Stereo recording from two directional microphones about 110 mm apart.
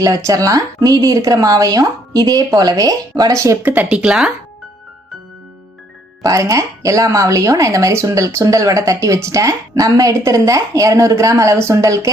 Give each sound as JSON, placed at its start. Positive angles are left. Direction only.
{"t": 0.0, "sound": "speech", "side_deg": -30}
{"t": 6.2, "sound": "speech", "side_deg": -30}